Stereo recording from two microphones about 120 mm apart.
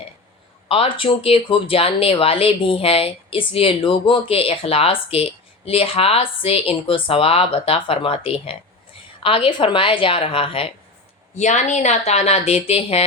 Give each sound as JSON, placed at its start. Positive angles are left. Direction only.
{"t": 0.7, "sound": "speech", "side_deg": 45}
{"t": 11.3, "sound": "speech", "side_deg": 80}